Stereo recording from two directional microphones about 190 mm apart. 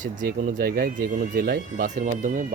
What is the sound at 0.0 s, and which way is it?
Speech, 45° right (ahead or behind).